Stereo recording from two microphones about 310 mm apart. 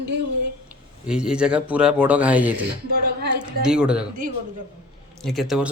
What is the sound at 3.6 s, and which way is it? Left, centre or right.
Speech, centre.